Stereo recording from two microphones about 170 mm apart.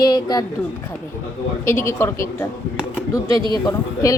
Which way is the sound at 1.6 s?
15° left (ahead or behind).